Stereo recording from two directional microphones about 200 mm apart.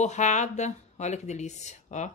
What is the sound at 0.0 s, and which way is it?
A woman's voice, 35° left (ahead or behind).